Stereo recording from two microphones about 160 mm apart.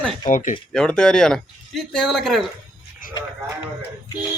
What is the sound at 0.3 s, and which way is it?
Speech, 55° left (ahead or behind).